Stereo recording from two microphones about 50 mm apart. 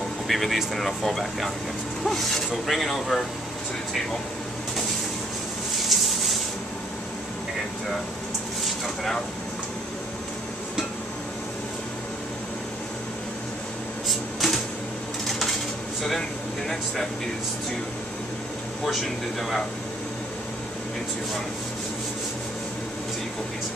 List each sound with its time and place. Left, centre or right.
0.3 s speech: centre
5.9 s a sound: centre
8.8 s speech: centre
14.0 s cupboard open or close: centre
15.2 s a sound: centre
16.0 s speech: centre
18.9 s speech: centre